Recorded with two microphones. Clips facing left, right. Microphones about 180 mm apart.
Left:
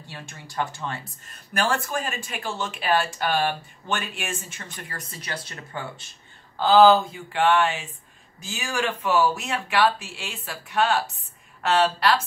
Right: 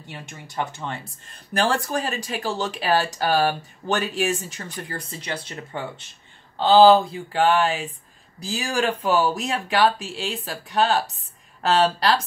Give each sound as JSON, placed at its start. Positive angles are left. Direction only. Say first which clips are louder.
{"t": 0.1, "sound": "speech", "louder": "right 2 dB", "side_deg": -20}
{"t": 1.5, "sound": "speech", "louder": "right 3 dB", "side_deg": -35}